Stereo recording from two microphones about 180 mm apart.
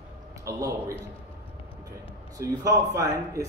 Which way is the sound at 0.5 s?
15° right (ahead or behind).